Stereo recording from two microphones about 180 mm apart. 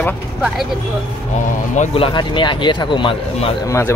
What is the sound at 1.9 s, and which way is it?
Speech, 30° left (ahead or behind).